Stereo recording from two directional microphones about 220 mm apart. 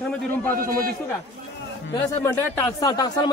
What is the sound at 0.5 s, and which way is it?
Speech, 40° right (ahead or behind).